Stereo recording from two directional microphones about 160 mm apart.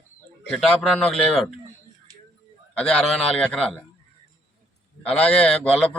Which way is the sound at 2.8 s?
5° left (ahead or behind).